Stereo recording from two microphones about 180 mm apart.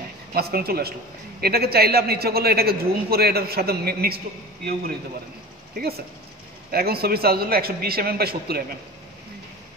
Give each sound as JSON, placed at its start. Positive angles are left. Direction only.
{"t": 0.3, "sound": "a man's voice", "side_deg": -60}
{"t": 5.8, "sound": "a man's voice", "side_deg": -60}